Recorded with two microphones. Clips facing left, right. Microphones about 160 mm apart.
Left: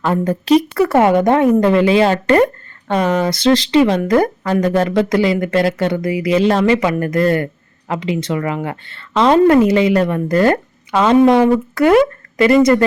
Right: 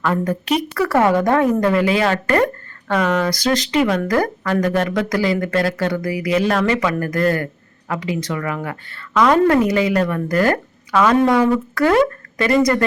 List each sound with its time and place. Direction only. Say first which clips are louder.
0.0 s a woman's voice: left 3 dB; 25° left (ahead or behind)